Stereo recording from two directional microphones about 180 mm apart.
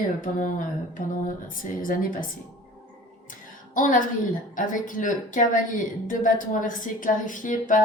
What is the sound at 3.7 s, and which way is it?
Speech, 45° left (ahead or behind).